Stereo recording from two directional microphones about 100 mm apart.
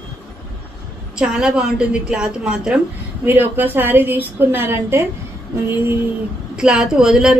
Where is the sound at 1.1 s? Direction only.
10° right (ahead or behind); by 5.0 s 25° right (ahead or behind).